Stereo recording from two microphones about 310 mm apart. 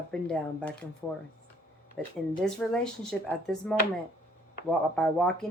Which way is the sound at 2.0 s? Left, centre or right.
Centre.